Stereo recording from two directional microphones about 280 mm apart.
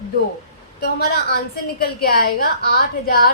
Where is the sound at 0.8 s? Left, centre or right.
Left.